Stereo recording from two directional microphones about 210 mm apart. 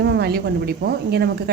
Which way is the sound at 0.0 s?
50° right (ahead or behind).